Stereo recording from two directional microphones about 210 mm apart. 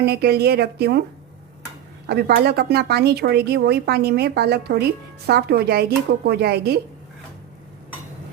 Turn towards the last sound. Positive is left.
turn(degrees=-50)  # may be behind; listen again after turning